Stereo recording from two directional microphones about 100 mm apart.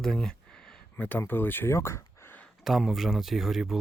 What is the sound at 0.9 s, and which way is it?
Speech, 20° left (ahead or behind).